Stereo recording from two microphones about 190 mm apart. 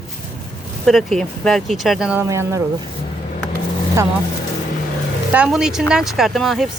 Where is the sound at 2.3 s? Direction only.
15° right (ahead or behind).